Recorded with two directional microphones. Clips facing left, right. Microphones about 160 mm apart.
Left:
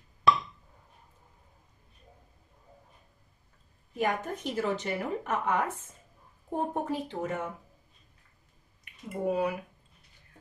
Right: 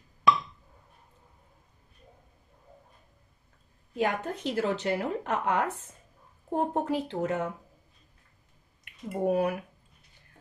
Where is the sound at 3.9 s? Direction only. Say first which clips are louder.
Right 1 dB; 75° right (ahead or behind).